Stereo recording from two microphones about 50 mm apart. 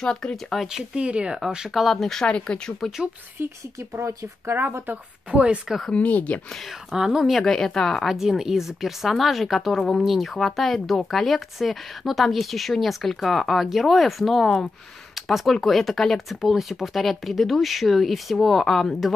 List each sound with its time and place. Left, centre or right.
0.0 s a woman's voice: centre
0.7 s speech: centre
1.7 s speech: centre
2.2 s a woman's voice: centre
3.9 s speech: right
5.9 s speech: left
6.9 s speech: centre
7.3 s a woman's voice: centre
8.0 s speech: centre
15.1 s a sound: centre
15.5 s speech: centre
16.3 s speech: centre